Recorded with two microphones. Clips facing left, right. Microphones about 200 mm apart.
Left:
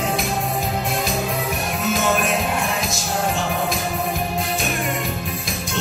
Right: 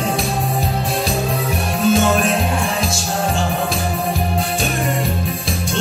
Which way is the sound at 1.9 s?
30° right (ahead or behind).